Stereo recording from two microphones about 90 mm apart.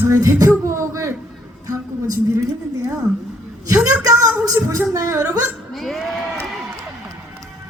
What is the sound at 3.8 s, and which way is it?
Speech, 40° right (ahead or behind).